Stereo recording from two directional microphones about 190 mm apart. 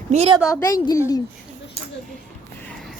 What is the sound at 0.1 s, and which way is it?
Speech, 35° right (ahead or behind).